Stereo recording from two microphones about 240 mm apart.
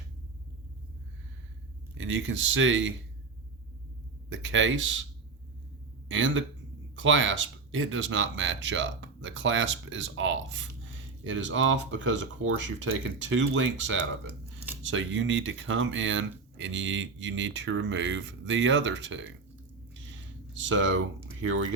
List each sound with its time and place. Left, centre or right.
2.0 s speech: right
4.3 s speech: right
6.1 s speech: right
20.5 s speech: right